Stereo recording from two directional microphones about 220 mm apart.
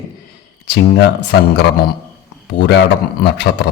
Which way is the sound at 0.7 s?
50° left (ahead or behind).